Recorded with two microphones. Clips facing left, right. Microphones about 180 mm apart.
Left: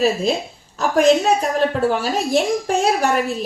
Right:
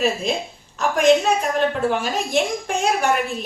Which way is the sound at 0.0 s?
35° left (ahead or behind).